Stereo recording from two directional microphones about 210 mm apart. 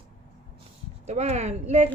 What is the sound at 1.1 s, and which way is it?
Speech, 30° right (ahead or behind).